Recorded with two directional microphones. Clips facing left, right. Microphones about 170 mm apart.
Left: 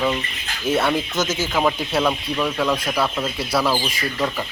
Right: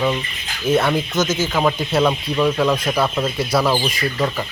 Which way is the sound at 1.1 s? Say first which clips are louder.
Right 3 dB; 20° right (ahead or behind).